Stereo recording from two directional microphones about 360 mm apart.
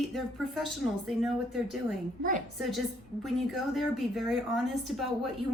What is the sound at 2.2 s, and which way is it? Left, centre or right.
Speech, right.